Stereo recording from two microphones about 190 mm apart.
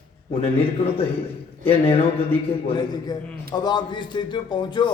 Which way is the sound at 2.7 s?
20° left (ahead or behind).